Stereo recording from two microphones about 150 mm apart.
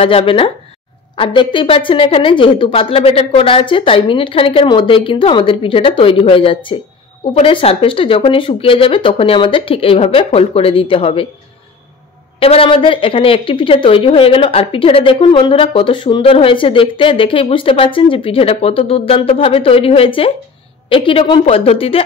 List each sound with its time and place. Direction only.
0.0 s speech: 40° left (ahead or behind)
12.4 s speech: 40° left (ahead or behind)